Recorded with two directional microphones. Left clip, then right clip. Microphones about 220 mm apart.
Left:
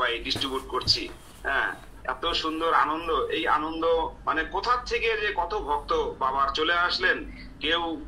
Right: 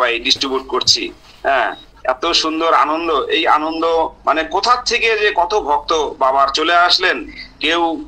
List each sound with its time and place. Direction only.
0.0 s speech: 50° right (ahead or behind)